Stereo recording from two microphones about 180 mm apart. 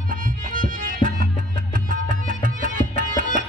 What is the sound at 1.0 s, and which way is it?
Music, 50° left (ahead or behind).